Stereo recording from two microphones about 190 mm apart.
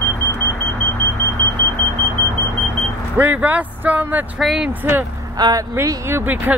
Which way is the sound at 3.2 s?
10° right (ahead or behind).